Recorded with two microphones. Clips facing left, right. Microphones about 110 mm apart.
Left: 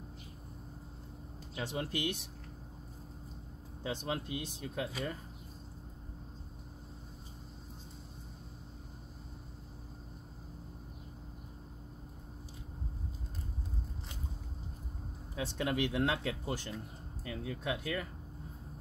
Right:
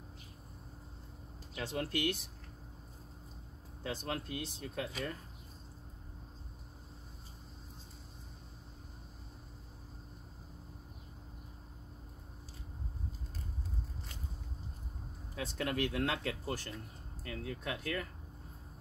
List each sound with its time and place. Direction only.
1.5 s speech: 15° left (ahead or behind)
3.8 s speech: 15° left (ahead or behind)
15.3 s speech: 15° left (ahead or behind)